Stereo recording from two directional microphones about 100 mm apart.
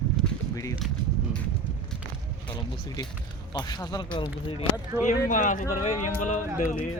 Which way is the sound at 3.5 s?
45° left (ahead or behind).